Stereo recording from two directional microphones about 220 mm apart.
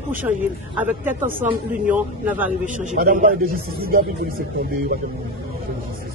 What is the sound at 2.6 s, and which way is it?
A man's voice, 40° right (ahead or behind).